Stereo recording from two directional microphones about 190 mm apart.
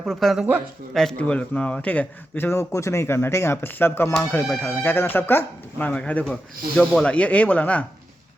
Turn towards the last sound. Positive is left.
turn(degrees=5)  # may be behind; listen again after turning